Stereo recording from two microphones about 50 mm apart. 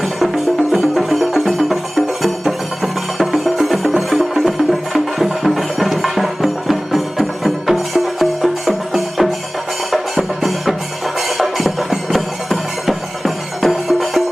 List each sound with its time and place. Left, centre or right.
0.7 s music: centre